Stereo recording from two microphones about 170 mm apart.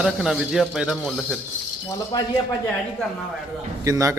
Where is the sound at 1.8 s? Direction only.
20° left (ahead or behind).